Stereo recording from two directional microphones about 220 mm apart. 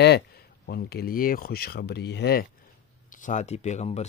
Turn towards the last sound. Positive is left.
turn(degrees=30)  # may be behind; listen again after turning